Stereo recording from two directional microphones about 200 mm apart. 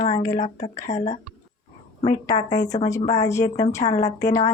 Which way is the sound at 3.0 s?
35° left (ahead or behind).